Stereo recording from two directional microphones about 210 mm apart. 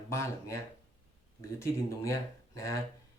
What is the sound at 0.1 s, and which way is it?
Speech, 15° left (ahead or behind).